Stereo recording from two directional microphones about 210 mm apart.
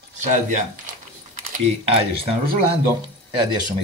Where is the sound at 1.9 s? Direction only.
25° right (ahead or behind).